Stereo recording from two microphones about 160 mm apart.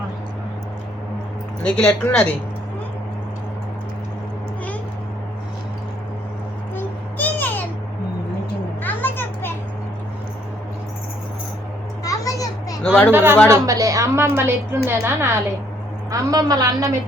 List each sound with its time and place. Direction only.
1.6 s speech: 5° left (ahead or behind)
6.7 s a sound: 10° left (ahead or behind)
8.8 s children playing: 10° left (ahead or behind)
12.0 s children playing: 20° left (ahead or behind)
12.8 s speech: 5° left (ahead or behind)
13.1 s a woman's voice: 15° right (ahead or behind)